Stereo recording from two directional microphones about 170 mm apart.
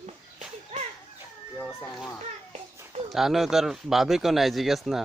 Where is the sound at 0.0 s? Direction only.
40° right (ahead or behind).